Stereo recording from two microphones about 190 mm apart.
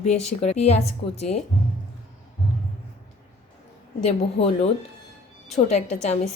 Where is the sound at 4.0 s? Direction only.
35° left (ahead or behind).